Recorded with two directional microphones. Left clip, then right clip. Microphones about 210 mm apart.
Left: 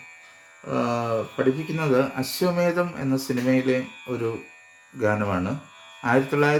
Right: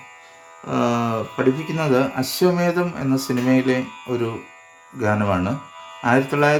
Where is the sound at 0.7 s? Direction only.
25° right (ahead or behind).